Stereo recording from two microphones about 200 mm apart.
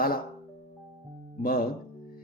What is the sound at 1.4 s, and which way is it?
Speech, 45° left (ahead or behind).